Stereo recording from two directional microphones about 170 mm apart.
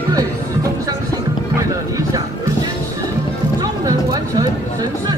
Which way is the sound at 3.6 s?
20° right (ahead or behind).